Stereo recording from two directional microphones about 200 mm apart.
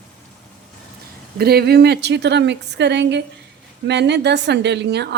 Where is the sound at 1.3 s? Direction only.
55° right (ahead or behind).